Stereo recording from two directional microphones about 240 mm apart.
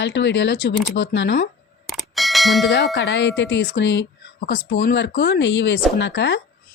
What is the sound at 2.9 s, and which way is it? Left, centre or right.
A woman's voice, left.